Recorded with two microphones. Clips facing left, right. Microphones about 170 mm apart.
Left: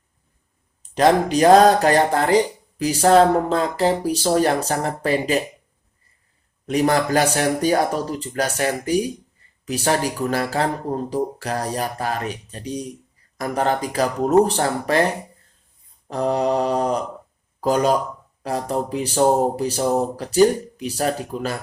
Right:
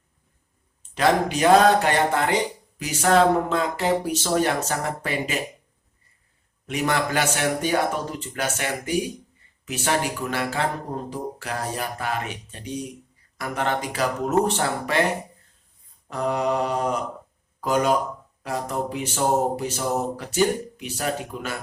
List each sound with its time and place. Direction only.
0.8 s speech: 35° left (ahead or behind)
6.7 s speech: 35° left (ahead or behind)
16.0 s speech: 35° left (ahead or behind)